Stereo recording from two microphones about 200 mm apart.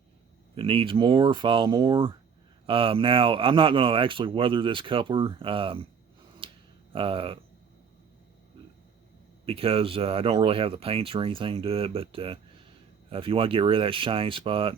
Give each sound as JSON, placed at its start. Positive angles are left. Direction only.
{"t": 0.5, "sound": "speech", "side_deg": -25}
{"t": 6.4, "sound": "a sound", "side_deg": -25}
{"t": 6.9, "sound": "speech", "side_deg": -25}
{"t": 9.5, "sound": "speech", "side_deg": -30}